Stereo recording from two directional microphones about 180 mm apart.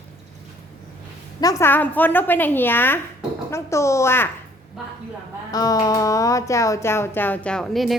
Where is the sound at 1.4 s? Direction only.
15° left (ahead or behind).